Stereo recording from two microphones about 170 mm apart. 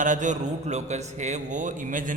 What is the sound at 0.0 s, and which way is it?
A man's voice, 50° right (ahead or behind).